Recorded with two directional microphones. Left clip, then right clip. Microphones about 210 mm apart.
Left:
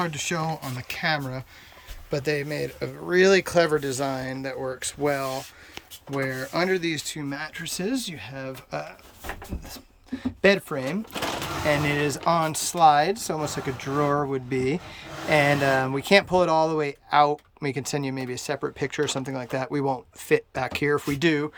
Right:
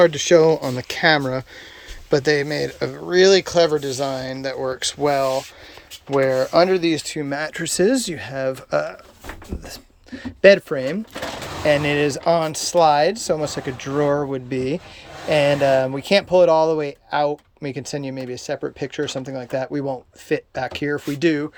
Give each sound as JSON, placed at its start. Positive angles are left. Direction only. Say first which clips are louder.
{"t": 0.0, "sound": "speech", "louder": "right 15 dB", "side_deg": -10}
{"t": 6.4, "sound": "speech", "louder": "right 9 dB", "side_deg": -5}